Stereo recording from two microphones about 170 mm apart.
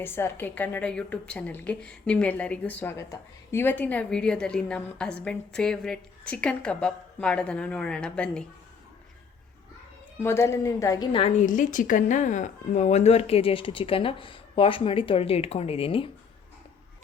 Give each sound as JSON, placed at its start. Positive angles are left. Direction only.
{"t": 0.0, "sound": "a woman's voice", "side_deg": 15}
{"t": 10.2, "sound": "a woman's voice", "side_deg": 15}